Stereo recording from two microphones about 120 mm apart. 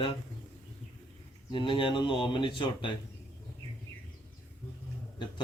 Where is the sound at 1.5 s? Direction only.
45° left (ahead or behind).